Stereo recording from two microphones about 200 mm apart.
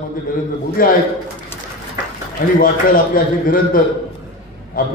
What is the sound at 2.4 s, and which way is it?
A man's voice, 45° left (ahead or behind).